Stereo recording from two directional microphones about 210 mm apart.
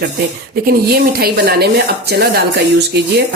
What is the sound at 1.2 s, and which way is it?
A woman's voice, 50° right (ahead or behind).